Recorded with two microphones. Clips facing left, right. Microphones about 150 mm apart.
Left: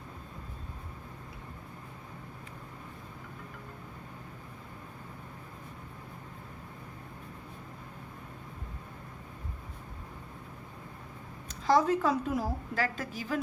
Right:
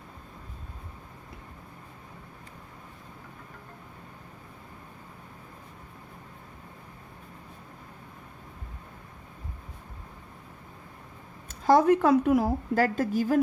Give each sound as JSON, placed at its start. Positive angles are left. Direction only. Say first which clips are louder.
{"t": 11.4, "sound": "a woman's voice", "louder": "right 6 dB", "side_deg": -50}